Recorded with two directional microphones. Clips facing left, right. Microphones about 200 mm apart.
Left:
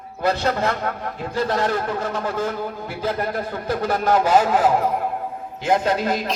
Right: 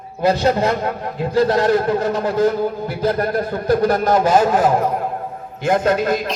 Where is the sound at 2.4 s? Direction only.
40° right (ahead or behind).